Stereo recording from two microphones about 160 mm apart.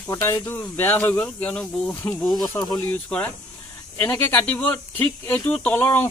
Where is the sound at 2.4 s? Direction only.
25° left (ahead or behind).